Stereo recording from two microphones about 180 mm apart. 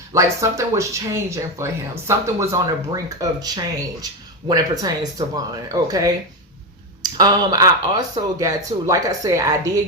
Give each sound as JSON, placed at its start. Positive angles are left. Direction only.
{"t": 0.1, "sound": "speech", "side_deg": -15}